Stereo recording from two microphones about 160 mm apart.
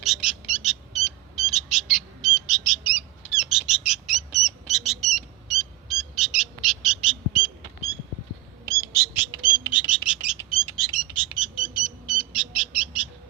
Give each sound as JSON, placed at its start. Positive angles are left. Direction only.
{"t": 0.0, "sound": "bird", "side_deg": 0}
{"t": 8.7, "sound": "bird", "side_deg": -20}
{"t": 9.7, "sound": "bird", "side_deg": -5}